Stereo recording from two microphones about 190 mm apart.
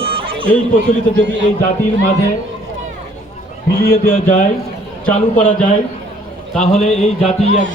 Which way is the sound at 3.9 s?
45° left (ahead or behind).